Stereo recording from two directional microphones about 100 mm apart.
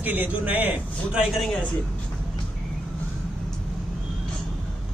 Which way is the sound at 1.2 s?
Centre (ahead or behind).